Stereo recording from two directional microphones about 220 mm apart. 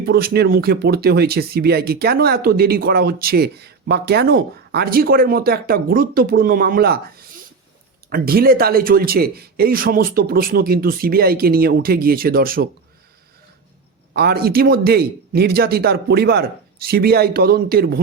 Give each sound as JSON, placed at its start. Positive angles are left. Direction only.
{"t": 0.0, "sound": "speech", "side_deg": -45}
{"t": 14.2, "sound": "speech", "side_deg": -45}